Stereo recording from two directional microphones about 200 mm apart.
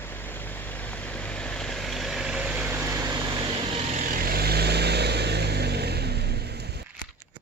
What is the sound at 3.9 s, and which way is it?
Vehicle, 50° right (ahead or behind).